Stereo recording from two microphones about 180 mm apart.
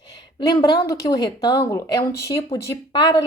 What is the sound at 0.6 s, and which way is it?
A woman's voice, 25° left (ahead or behind).